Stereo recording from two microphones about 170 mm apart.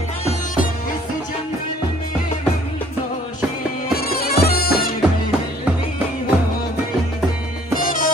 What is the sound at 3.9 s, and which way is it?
Bagpipes, 65° left (ahead or behind).